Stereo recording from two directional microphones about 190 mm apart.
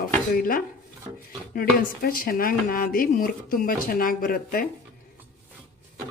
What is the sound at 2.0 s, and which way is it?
Speech, 50° left (ahead or behind).